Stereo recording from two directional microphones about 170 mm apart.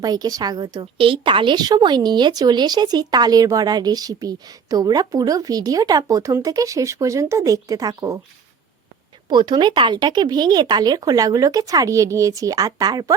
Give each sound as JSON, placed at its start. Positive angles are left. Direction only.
{"t": 0.0, "sound": "a woman's voice", "side_deg": -20}
{"t": 9.3, "sound": "a woman's voice", "side_deg": -25}